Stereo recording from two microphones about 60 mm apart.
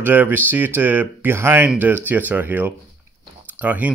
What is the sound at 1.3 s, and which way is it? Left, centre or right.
Speech, right.